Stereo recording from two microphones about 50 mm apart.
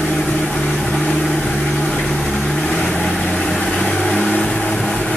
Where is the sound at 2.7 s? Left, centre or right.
Left.